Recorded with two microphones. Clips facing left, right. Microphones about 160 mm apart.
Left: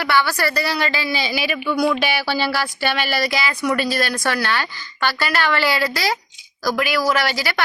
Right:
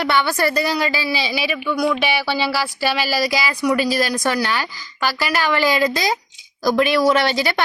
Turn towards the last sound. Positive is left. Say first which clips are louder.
# right 3 dB
turn(degrees=-25)  # may be behind; listen again after turning